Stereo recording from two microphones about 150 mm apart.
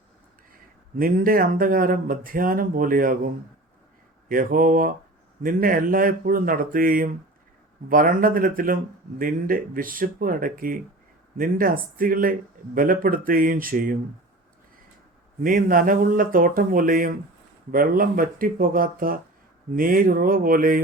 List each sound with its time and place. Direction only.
0.9 s speech: 70° right (ahead or behind)
4.3 s speech: 70° right (ahead or behind)
15.4 s speech: 70° right (ahead or behind)